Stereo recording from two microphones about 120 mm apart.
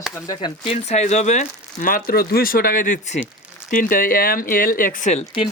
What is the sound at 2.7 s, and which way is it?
Speech, 90° left.